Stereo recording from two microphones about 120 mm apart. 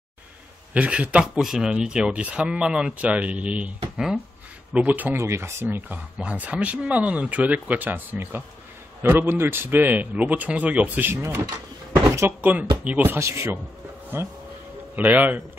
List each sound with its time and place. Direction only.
0.7 s speech: 10° right (ahead or behind)